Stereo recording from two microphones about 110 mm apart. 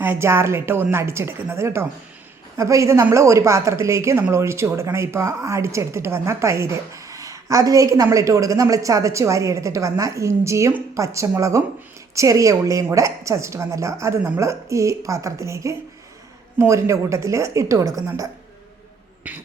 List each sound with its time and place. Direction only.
0.0 s speech: 25° right (ahead or behind)